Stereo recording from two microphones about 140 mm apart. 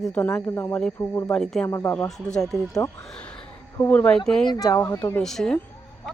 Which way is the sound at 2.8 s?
20° left (ahead or behind).